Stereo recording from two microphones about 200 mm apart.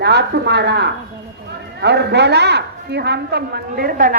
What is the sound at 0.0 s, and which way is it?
A woman's voice, 55° right (ahead or behind).